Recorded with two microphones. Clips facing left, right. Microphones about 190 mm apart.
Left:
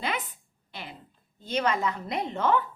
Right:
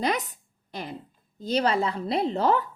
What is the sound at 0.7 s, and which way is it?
Speech, 40° right (ahead or behind).